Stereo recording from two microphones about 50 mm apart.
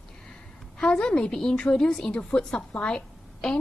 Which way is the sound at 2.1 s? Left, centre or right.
Left.